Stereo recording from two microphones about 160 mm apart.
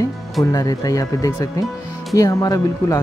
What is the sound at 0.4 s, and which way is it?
Speech, 25° left (ahead or behind).